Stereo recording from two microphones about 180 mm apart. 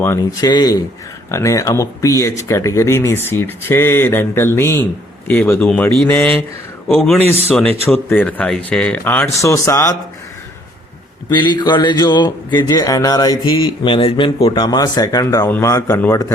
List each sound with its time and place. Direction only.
0.0 s speech: 15° left (ahead or behind)
7.5 s speech: 5° left (ahead or behind)
11.3 s speech: 25° left (ahead or behind)